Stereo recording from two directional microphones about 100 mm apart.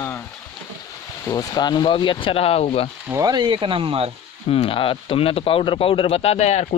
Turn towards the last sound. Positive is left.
turn(degrees=90)